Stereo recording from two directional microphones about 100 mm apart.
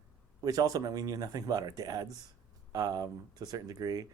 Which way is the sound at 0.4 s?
40° right (ahead or behind).